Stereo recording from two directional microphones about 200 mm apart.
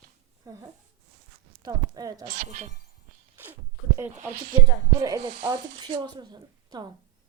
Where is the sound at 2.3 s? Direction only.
45° right (ahead or behind).